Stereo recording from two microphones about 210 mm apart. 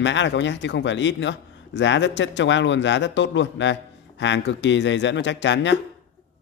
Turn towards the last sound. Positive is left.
turn(degrees=60)  # may be behind; listen again after turning